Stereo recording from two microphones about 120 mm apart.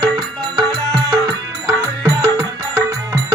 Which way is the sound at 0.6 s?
5° left (ahead or behind).